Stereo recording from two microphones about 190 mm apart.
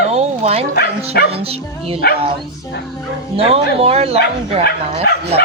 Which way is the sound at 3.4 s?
30° right (ahead or behind).